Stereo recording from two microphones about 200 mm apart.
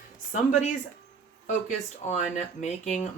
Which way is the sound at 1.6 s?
35° left (ahead or behind).